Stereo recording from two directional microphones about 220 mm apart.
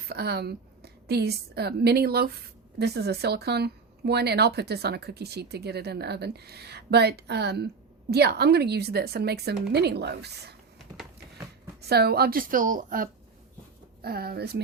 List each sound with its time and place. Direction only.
0.1 s speech: 45° right (ahead or behind)
11.8 s a woman's voice: 45° right (ahead or behind)